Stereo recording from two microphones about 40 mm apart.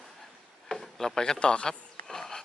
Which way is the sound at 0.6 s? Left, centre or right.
Centre.